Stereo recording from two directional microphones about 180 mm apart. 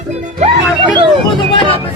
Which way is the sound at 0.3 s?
40° right (ahead or behind).